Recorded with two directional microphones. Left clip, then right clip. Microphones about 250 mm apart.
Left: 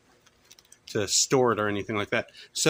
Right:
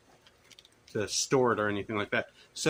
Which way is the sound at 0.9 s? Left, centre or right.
Left.